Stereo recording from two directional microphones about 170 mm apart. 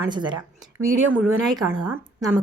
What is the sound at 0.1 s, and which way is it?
Speech, 25° right (ahead or behind).